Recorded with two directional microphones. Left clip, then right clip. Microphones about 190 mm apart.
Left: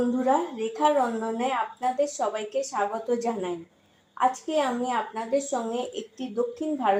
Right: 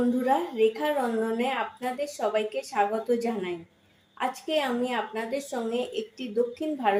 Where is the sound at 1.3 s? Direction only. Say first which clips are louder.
Left 1 dB; centre (ahead or behind).